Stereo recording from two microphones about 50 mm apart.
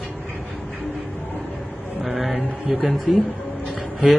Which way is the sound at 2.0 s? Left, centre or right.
Centre.